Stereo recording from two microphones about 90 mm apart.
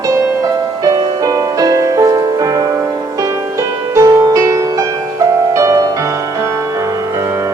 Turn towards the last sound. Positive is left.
turn(degrees=-35)  # may be behind; listen again after turning